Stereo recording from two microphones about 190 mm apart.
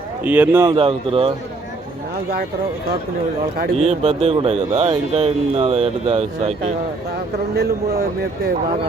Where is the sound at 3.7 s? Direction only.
35° right (ahead or behind).